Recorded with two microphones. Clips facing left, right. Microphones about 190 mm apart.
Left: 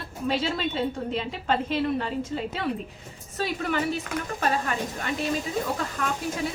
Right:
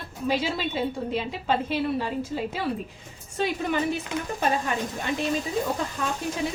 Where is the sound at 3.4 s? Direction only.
15° right (ahead or behind).